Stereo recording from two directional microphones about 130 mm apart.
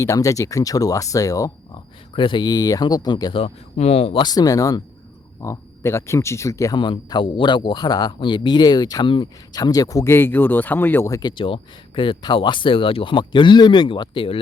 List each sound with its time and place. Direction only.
0.0 s speech: 25° left (ahead or behind)
2.1 s a man's voice: 40° left (ahead or behind)
3.4 s speech: 50° left (ahead or behind)
4.2 s speech: 30° left (ahead or behind)
6.7 s a man's voice: 40° left (ahead or behind)